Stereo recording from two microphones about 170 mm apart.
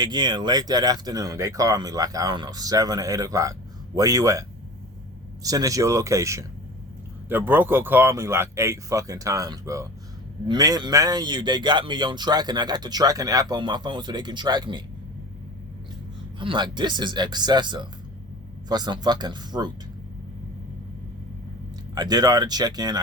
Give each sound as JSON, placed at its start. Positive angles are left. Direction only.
{"t": 0.0, "sound": "speech", "side_deg": -25}
{"t": 16.4, "sound": "speech", "side_deg": -30}
{"t": 21.9, "sound": "speech", "side_deg": -25}